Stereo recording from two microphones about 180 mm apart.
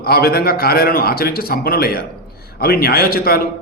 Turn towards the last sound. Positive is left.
turn(degrees=55)  # may be behind; listen again after turning